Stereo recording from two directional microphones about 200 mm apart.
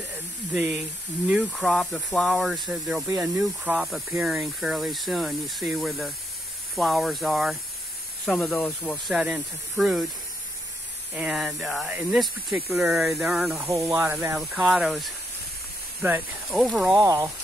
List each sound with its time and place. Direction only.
1.3 s speech: centre (ahead or behind)
11.1 s speech: 5° right (ahead or behind)
13.7 s speech: 15° right (ahead or behind)
17.0 s speech: 15° right (ahead or behind)